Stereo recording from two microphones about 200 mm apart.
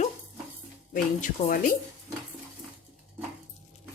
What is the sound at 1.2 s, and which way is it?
Speech, 40° left (ahead or behind).